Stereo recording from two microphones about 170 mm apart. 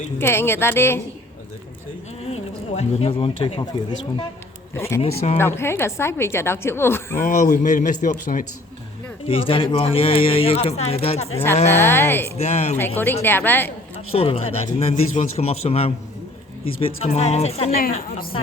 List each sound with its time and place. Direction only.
0.2 s a woman's voice: 15° left (ahead or behind)
2.2 s speech: 40° left (ahead or behind)
4.7 s a woman's voice: 15° left (ahead or behind)
7.2 s speech: 50° left (ahead or behind)
9.2 s speech: 30° left (ahead or behind)
11.7 s a woman's voice: 15° left (ahead or behind)
12.4 s speech: 40° left (ahead or behind)
13.2 s a woman's voice: 10° left (ahead or behind)
14.1 s speech: 35° left (ahead or behind)